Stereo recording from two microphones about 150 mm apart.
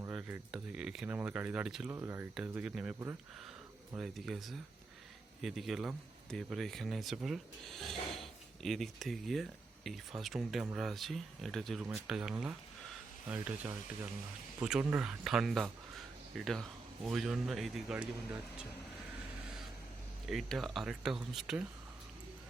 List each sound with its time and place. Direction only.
0.1 s speech: 10° right (ahead or behind)
1.9 s speech: 15° right (ahead or behind)
2.3 s speech: 5° right (ahead or behind)
3.9 s speech: centre (ahead or behind)
20.2 s speech: centre (ahead or behind)